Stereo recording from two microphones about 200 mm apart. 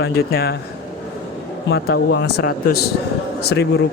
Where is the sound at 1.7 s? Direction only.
55° left (ahead or behind).